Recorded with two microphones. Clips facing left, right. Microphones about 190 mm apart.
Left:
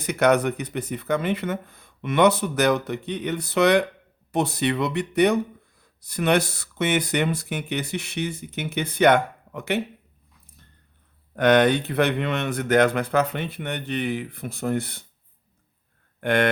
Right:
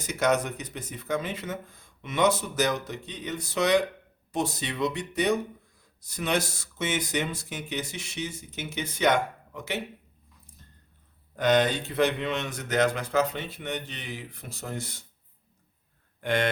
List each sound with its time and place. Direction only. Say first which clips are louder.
0.0 s speech: left 6 dB; 60° left (ahead or behind)
11.3 s speech: left 5 dB; 65° left (ahead or behind)
16.2 s speech: left 5 dB; 60° left (ahead or behind)